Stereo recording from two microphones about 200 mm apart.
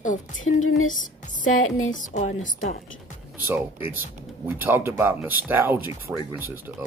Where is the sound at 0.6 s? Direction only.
90° left.